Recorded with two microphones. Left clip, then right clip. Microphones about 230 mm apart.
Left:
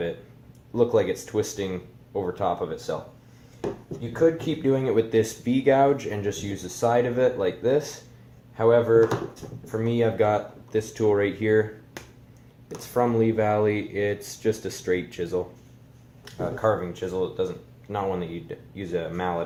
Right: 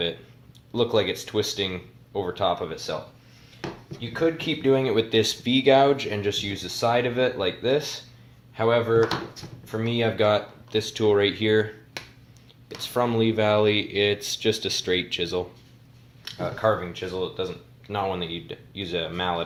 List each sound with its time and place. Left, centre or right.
0.7 s speech: right
4.1 s speech: right